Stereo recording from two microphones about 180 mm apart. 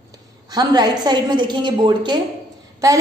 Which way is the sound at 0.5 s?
20° right (ahead or behind).